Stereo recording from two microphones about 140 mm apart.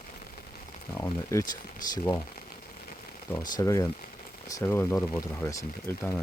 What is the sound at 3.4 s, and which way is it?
Speech, 25° left (ahead or behind).